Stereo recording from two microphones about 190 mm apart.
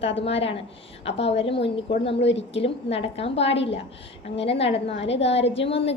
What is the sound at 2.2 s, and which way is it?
Speech, 70° left (ahead or behind).